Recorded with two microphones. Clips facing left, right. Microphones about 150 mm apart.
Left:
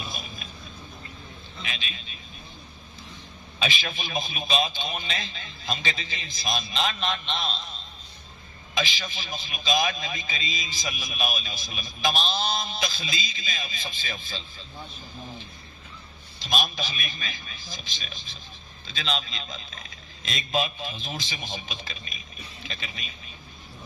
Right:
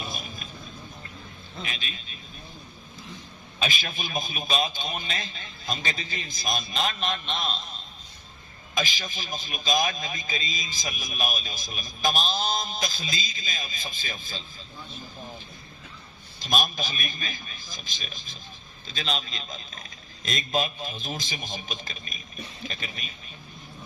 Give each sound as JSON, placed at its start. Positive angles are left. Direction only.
{"t": 0.1, "sound": "a sound", "side_deg": -45}
{"t": 1.6, "sound": "a man's voice", "side_deg": -45}
{"t": 3.6, "sound": "a man's voice", "side_deg": -45}
{"t": 8.7, "sound": "a man's voice", "side_deg": -45}
{"t": 16.4, "sound": "a man's voice", "side_deg": -45}